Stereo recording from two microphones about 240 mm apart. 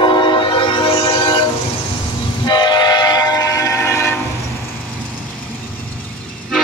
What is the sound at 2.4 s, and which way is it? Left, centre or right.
Train, centre.